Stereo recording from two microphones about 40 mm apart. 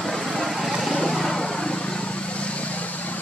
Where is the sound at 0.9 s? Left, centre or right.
Centre; by 3.2 s left.